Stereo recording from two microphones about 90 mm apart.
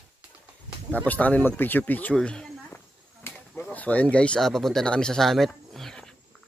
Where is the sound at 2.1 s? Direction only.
5° left (ahead or behind).